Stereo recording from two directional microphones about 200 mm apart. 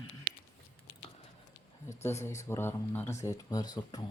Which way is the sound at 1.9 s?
15° left (ahead or behind).